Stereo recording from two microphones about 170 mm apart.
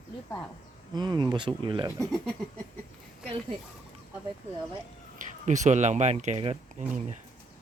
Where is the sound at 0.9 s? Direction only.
25° right (ahead or behind).